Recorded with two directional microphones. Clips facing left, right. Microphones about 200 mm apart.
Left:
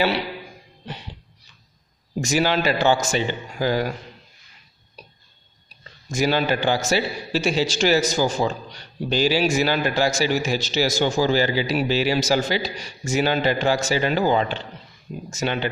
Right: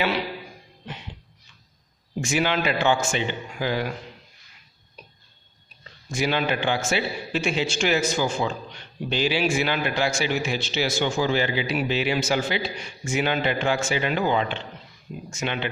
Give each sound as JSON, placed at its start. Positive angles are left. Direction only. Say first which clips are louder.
{"t": 0.8, "sound": "a sound", "louder": "left 2 dB", "side_deg": 35}
{"t": 2.1, "sound": "a man's voice", "louder": "left 3 dB", "side_deg": 40}
{"t": 6.0, "sound": "a man's voice", "louder": "left 3 dB", "side_deg": 40}